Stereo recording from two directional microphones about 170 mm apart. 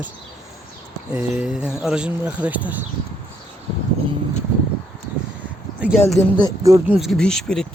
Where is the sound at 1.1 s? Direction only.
5° right (ahead or behind).